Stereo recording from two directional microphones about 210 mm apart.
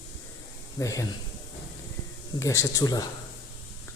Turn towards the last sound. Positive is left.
turn(degrees=15)  # may be behind; listen again after turning